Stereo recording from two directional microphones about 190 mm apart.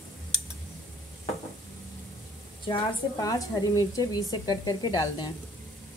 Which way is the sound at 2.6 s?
20° left (ahead or behind).